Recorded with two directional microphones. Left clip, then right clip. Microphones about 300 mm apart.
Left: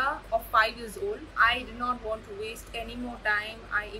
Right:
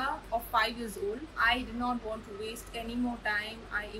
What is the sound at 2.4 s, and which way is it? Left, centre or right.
A woman's voice, centre.